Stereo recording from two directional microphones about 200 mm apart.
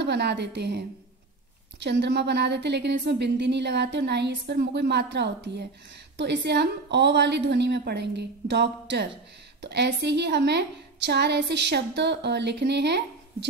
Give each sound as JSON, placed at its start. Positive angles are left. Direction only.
{"t": 0.0, "sound": "a woman's voice", "side_deg": -60}